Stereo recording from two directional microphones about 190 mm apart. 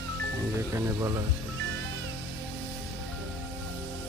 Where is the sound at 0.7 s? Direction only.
15° right (ahead or behind).